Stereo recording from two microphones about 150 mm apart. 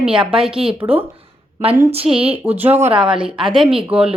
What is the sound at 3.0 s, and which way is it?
A woman's voice, 35° right (ahead or behind).